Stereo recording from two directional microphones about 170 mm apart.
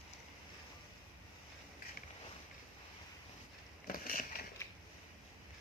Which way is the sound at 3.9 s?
55° left (ahead or behind).